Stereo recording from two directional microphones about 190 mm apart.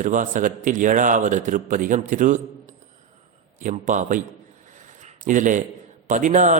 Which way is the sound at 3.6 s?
40° right (ahead or behind).